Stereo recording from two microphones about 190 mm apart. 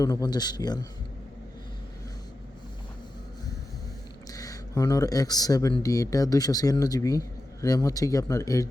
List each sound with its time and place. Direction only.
0.0 s a man's voice: 20° left (ahead or behind)
4.3 s speech: 15° left (ahead or behind)